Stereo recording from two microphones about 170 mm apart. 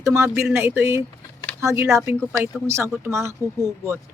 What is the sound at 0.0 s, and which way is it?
Speech, 15° right (ahead or behind).